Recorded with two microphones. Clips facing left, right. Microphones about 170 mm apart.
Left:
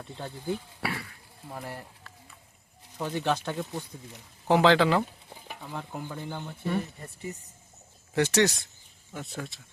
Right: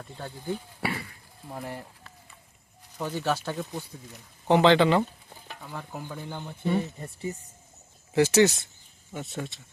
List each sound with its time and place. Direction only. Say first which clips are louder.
0.8 s speech: right 2 dB; centre (ahead or behind)
7.0 s speech: right 4 dB; 30° right (ahead or behind)
8.1 s speech: right 4 dB; 5° right (ahead or behind)